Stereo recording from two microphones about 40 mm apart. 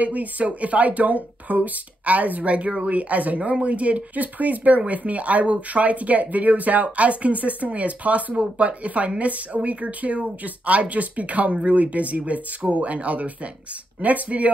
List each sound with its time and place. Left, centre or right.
0.0 s speech: right